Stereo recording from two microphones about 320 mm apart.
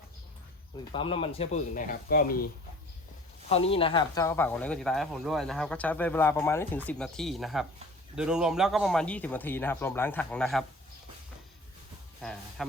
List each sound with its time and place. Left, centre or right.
0.9 s speech: centre
3.5 s speech: centre
12.2 s speech: centre